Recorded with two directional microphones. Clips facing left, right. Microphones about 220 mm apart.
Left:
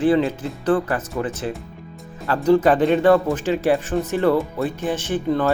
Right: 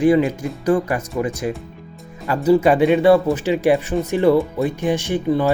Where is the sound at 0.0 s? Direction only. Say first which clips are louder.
Right 3 dB; 15° right (ahead or behind).